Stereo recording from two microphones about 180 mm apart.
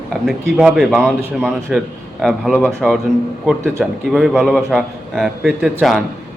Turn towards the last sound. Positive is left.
turn(degrees=-5)  # may be behind; listen again after turning